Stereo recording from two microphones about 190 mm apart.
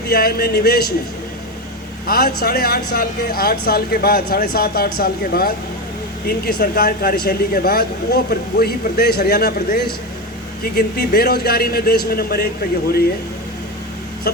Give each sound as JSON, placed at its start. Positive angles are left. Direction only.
{"t": 0.1, "sound": "speech", "side_deg": 55}
{"t": 2.0, "sound": "speech", "side_deg": 50}